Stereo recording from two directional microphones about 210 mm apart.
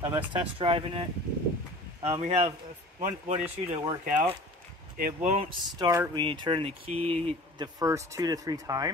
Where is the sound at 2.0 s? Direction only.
30° right (ahead or behind).